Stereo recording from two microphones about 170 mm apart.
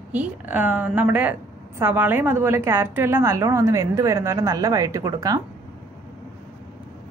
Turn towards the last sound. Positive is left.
turn(degrees=-20)  # may be behind; listen again after turning